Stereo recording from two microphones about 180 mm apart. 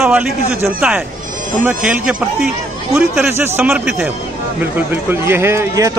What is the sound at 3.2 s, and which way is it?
Speech, 15° right (ahead or behind).